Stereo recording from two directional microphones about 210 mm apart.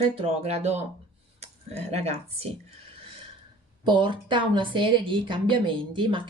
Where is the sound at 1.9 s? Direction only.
30° right (ahead or behind).